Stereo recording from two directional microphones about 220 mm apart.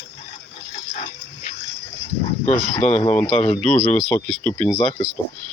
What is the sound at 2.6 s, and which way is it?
Speech, centre (ahead or behind).